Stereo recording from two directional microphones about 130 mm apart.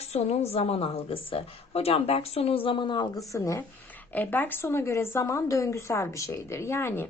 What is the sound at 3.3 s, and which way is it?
Speech, 25° left (ahead or behind).